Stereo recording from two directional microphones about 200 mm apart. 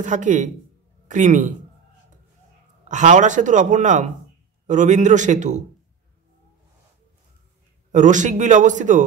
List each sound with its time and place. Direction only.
0.0 s a man's voice: 40° right (ahead or behind)
2.9 s a man's voice: 35° right (ahead or behind)
7.9 s a man's voice: 40° right (ahead or behind)